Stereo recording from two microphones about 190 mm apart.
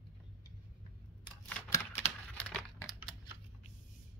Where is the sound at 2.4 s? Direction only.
5° left (ahead or behind).